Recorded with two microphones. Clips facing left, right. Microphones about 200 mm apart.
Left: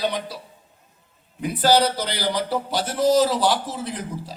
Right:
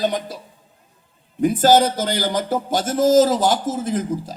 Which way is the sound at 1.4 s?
45° right (ahead or behind).